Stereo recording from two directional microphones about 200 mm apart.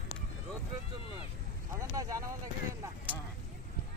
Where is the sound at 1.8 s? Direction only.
15° right (ahead or behind).